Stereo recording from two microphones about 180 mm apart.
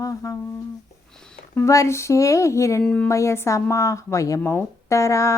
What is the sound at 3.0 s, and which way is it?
Speech, 15° left (ahead or behind).